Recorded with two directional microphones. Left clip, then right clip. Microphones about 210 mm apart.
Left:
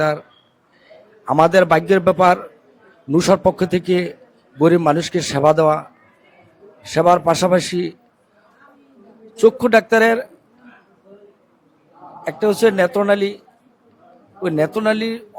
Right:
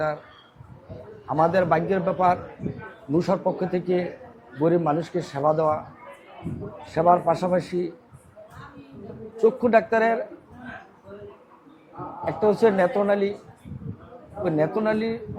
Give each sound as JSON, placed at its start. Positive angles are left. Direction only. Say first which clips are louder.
{"t": 1.4, "sound": "a man's voice", "louder": "left 8 dB", "side_deg": 40}
{"t": 6.9, "sound": "a man's voice", "louder": "left 6 dB", "side_deg": 35}
{"t": 9.4, "sound": "a man's voice", "louder": "left 6 dB", "side_deg": 40}
{"t": 12.2, "sound": "a man's voice", "louder": "left 4 dB", "side_deg": 30}
{"t": 14.4, "sound": "a man's voice", "louder": "left 5 dB", "side_deg": 35}